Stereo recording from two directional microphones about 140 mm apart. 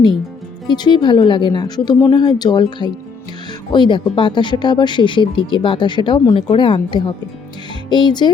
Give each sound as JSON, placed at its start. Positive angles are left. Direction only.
{"t": 0.7, "sound": "speech", "side_deg": 30}